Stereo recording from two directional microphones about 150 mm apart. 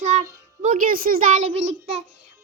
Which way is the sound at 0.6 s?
60° right (ahead or behind).